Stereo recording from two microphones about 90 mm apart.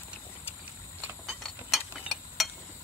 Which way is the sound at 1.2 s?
Centre (ahead or behind).